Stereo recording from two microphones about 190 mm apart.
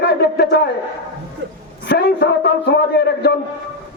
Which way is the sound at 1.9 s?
60° left (ahead or behind).